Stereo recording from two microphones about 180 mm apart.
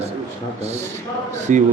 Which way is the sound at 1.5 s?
45° right (ahead or behind).